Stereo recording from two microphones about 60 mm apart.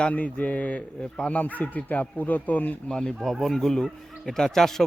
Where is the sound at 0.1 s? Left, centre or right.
Left.